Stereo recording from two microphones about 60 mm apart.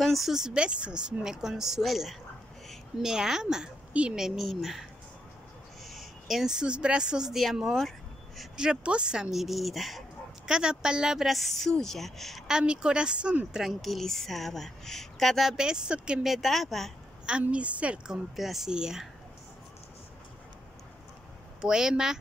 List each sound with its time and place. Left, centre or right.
0.0 s a woman's voice: centre
4.2 s a woman's voice: centre
5.9 s speech: centre
8.5 s speech: centre
10.5 s a woman's voice: centre
12.4 s a woman's voice: centre
13.5 s a woman's voice: centre
15.5 s a woman's voice: centre
16.3 s a woman's voice: centre
17.3 s a woman's voice: right
21.5 s a woman's voice: centre